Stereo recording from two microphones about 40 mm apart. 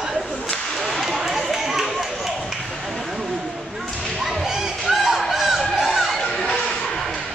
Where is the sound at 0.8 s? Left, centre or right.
Centre.